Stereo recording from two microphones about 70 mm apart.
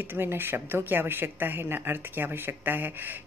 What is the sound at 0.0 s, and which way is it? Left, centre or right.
Speech, right.